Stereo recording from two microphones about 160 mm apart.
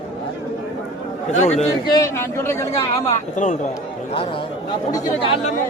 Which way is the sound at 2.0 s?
15° left (ahead or behind).